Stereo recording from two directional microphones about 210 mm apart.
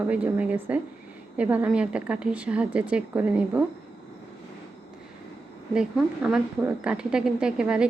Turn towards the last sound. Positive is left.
turn(degrees=-5)  # may be behind; listen again after turning